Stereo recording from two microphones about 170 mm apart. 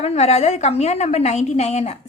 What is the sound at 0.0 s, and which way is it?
A woman's voice, 40° left (ahead or behind).